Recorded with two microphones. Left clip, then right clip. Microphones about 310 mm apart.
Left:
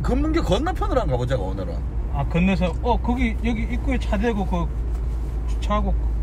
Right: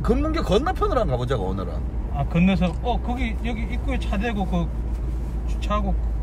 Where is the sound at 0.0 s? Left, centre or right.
Centre.